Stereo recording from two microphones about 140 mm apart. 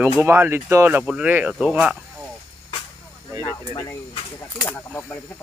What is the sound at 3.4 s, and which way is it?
Speech, 25° left (ahead or behind).